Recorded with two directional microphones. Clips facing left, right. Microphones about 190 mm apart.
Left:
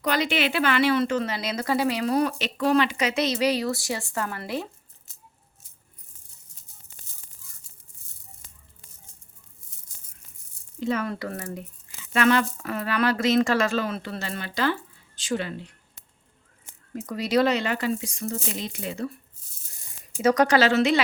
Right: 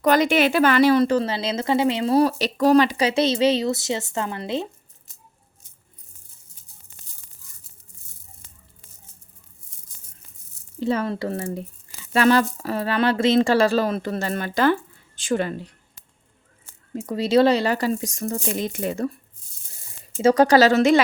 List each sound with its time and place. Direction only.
0.0 s speech: 45° right (ahead or behind); by 4.7 s 20° right (ahead or behind)
10.8 s speech: 30° right (ahead or behind)
16.9 s speech: 25° right (ahead or behind); by 19.1 s 45° right (ahead or behind)
20.1 s speech: 30° right (ahead or behind)